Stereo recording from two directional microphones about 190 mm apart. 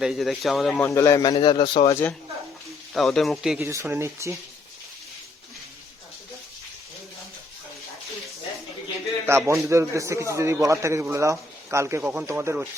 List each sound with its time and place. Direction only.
0.0 s speech: centre (ahead or behind)
0.9 s speech: 15° left (ahead or behind)
1.3 s a man's voice: 25° left (ahead or behind)
2.9 s speech: centre (ahead or behind)
3.6 s a man's voice: 15° right (ahead or behind)
9.2 s a man's voice: 15° right (ahead or behind)